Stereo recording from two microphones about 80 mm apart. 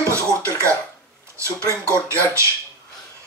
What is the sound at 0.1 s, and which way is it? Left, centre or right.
Throat clearing, right.